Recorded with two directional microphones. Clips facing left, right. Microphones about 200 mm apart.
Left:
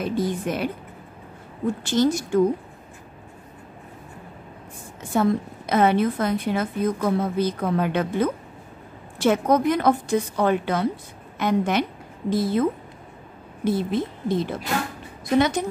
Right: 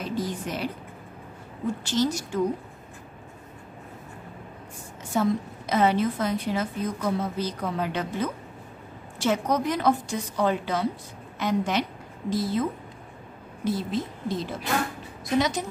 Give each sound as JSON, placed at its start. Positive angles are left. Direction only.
{"t": 0.0, "sound": "a woman's voice", "side_deg": 55}
{"t": 1.9, "sound": "a woman's voice", "side_deg": 55}
{"t": 5.1, "sound": "a woman's voice", "side_deg": 55}
{"t": 13.7, "sound": "a woman's voice", "side_deg": 55}